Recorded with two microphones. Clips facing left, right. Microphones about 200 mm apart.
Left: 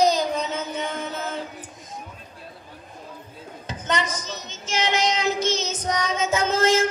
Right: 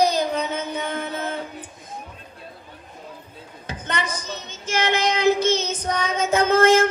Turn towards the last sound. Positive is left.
turn(degrees=-55)  # may be behind; listen again after turning